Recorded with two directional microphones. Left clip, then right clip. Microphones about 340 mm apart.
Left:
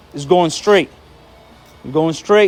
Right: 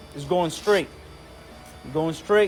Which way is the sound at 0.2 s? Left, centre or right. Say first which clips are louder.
Left 10 dB; left.